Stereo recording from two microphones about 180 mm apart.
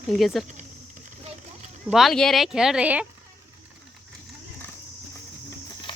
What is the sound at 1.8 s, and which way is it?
Speech, centre (ahead or behind).